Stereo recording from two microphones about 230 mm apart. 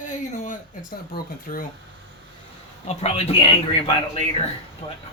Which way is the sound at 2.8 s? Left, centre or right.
Left.